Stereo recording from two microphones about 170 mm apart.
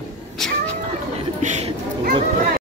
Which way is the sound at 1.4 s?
40° right (ahead or behind).